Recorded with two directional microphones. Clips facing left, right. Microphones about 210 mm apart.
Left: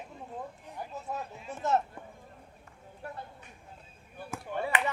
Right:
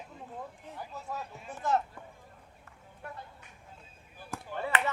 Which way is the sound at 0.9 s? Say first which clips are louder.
Left 2 dB; 20° left (ahead or behind).